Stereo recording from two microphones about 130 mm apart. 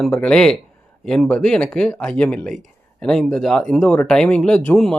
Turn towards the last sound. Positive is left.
turn(degrees=10)  # may be behind; listen again after turning